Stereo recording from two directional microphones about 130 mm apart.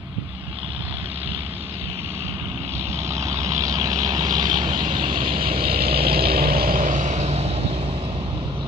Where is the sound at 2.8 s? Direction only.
20° right (ahead or behind); by 5.0 s 40° right (ahead or behind).